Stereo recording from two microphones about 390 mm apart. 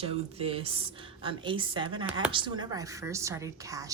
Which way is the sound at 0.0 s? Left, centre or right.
Centre.